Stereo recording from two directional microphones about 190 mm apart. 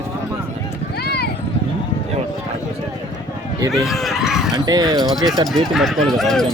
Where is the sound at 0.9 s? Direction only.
55° left (ahead or behind).